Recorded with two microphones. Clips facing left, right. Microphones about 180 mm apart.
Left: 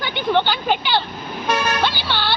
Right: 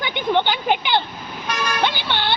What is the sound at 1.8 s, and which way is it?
Music, 20° right (ahead or behind).